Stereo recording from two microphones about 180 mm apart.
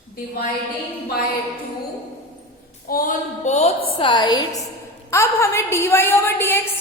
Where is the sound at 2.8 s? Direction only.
50° left (ahead or behind).